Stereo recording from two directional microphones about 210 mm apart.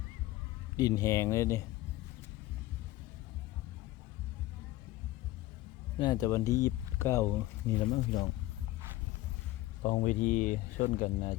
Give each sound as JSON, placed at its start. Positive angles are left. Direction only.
{"t": 0.8, "sound": "speech", "side_deg": 15}
{"t": 6.0, "sound": "speech", "side_deg": 20}
{"t": 7.9, "sound": "speech", "side_deg": 30}
{"t": 9.8, "sound": "speech", "side_deg": 35}